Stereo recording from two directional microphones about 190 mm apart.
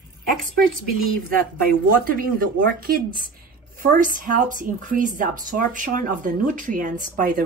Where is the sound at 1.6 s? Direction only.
50° right (ahead or behind).